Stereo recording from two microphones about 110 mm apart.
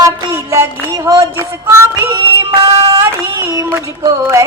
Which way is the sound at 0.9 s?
30° right (ahead or behind).